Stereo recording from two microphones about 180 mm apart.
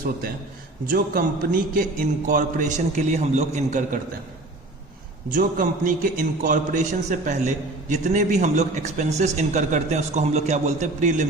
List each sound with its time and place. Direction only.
0.9 s a man's voice: 50° right (ahead or behind)
5.3 s a man's voice: 50° right (ahead or behind)